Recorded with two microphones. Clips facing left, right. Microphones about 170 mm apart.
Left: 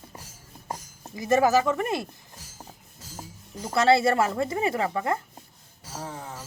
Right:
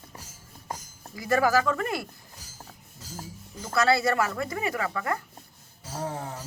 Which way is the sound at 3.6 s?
25° left (ahead or behind).